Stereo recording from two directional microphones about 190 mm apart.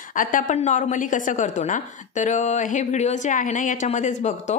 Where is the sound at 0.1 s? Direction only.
45° left (ahead or behind).